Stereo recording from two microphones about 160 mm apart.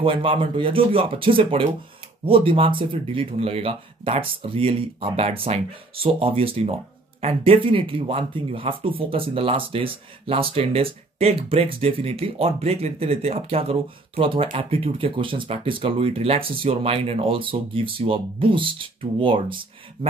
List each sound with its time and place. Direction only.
0.0 s speech: 35° right (ahead or behind)